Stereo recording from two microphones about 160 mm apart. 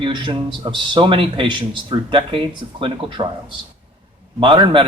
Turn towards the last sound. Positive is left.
turn(degrees=-30)  # may be behind; listen again after turning